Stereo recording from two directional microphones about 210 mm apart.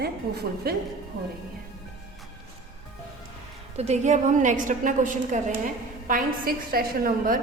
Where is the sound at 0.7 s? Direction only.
45° right (ahead or behind).